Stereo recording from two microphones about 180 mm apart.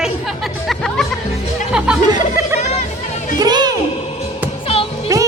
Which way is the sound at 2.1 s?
15° right (ahead or behind).